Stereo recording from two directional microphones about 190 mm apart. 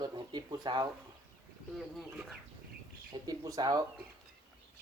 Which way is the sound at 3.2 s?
20° right (ahead or behind).